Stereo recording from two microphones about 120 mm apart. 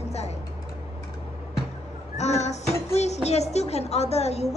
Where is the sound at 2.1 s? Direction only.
70° left (ahead or behind).